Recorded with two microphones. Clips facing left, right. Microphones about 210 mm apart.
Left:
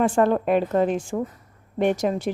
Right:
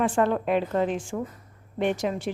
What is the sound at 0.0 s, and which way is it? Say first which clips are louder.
A woman's voice: left 4 dB; 45° left (ahead or behind).